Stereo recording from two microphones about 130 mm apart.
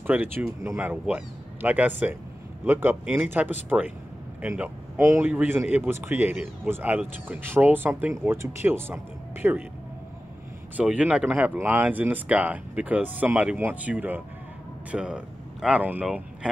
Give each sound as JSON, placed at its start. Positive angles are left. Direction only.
{"t": 0.0, "sound": "a man's voice", "side_deg": -15}
{"t": 5.0, "sound": "a man's voice", "side_deg": -20}
{"t": 10.8, "sound": "a man's voice", "side_deg": -10}